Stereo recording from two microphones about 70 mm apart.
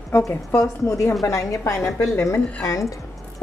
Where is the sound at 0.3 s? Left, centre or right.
Left.